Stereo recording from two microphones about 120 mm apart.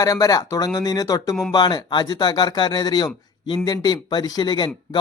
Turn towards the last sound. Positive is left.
turn(degrees=40)  # may be behind; listen again after turning